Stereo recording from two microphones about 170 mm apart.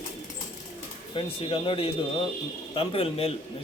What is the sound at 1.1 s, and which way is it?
Speech, 30° left (ahead or behind).